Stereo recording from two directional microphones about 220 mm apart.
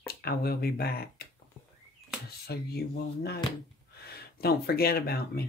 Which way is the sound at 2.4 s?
45° left (ahead or behind).